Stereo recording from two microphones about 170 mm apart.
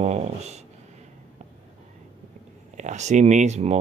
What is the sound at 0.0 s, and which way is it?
Speech, 40° right (ahead or behind).